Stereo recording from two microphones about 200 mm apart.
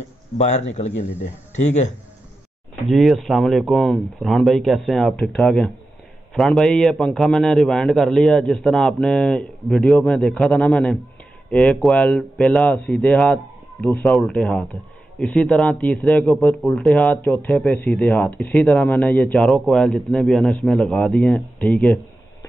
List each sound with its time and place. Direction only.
0.4 s speech: 35° left (ahead or behind)
2.7 s speech: centre (ahead or behind)